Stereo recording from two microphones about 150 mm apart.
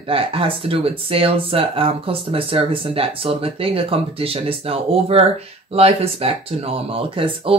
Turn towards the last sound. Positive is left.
turn(degrees=-40)  # may be behind; listen again after turning